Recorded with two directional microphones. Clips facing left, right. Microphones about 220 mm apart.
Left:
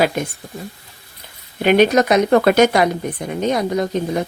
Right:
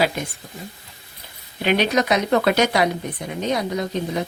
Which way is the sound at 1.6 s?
50° left (ahead or behind).